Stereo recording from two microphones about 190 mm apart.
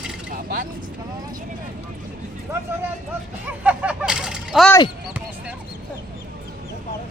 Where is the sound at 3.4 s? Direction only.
5° right (ahead or behind).